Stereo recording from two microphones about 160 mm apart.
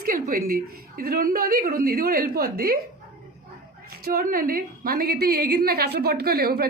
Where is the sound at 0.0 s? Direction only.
60° right (ahead or behind).